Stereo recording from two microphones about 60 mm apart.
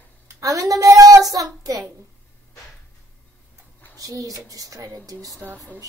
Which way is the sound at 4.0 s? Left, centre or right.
Right.